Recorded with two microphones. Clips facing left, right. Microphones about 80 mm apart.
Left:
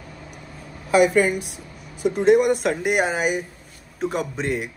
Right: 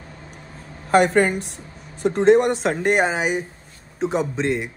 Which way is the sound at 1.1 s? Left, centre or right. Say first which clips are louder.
Right 1 dB; right.